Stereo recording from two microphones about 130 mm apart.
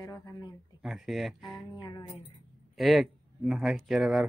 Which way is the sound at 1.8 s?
35° left (ahead or behind).